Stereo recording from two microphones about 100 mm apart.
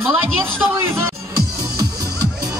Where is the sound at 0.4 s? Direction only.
25° right (ahead or behind).